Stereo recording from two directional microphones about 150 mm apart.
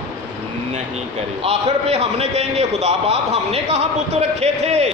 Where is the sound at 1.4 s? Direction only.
45° right (ahead or behind).